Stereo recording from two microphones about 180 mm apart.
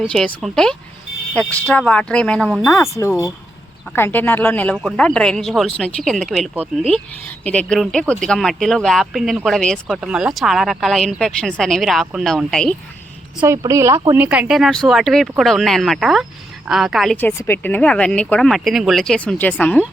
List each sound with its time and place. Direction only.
0.0 s speech: centre (ahead or behind)
2.9 s speech: 15° left (ahead or behind)
13.4 s speech: 15° right (ahead or behind); by 17.2 s centre (ahead or behind)
17.2 s speech: 10° left (ahead or behind)